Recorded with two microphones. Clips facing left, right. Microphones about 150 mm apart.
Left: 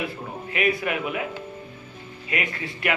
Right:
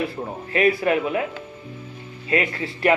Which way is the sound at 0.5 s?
35° right (ahead or behind).